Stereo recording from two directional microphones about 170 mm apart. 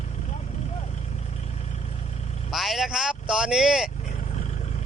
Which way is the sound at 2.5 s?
Centre (ahead or behind).